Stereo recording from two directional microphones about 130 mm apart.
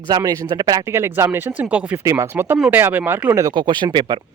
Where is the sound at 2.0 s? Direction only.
20° right (ahead or behind).